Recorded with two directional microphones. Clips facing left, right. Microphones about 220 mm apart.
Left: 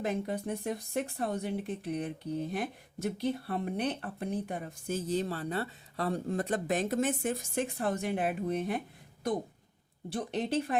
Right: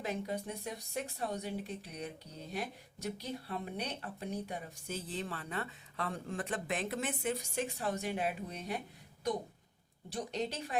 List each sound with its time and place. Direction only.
0.0 s speech: 50° left (ahead or behind)
10.2 s a woman's voice: 55° left (ahead or behind)